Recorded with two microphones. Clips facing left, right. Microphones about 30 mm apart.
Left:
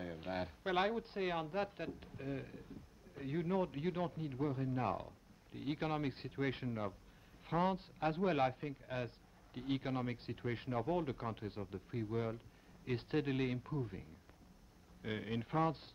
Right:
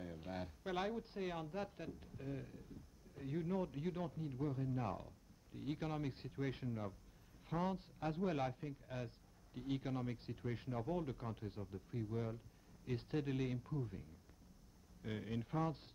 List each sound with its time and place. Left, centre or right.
0.0 s a man's voice: left